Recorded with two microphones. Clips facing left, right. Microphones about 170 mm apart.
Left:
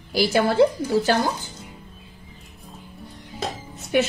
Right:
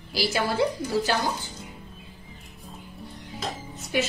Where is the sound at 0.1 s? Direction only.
50° left (ahead or behind).